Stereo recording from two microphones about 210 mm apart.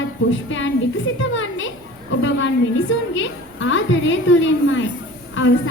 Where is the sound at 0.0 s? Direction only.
65° left (ahead or behind).